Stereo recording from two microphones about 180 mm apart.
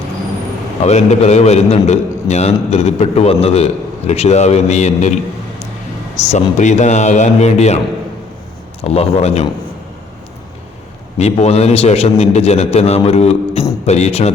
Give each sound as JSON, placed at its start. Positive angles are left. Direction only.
{"t": 0.9, "sound": "a man's voice", "side_deg": 35}
{"t": 6.2, "sound": "a man's voice", "side_deg": 40}
{"t": 8.8, "sound": "a man's voice", "side_deg": 35}
{"t": 11.2, "sound": "a man's voice", "side_deg": 35}